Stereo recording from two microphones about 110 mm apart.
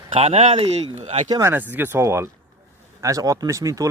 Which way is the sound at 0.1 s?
60° right (ahead or behind).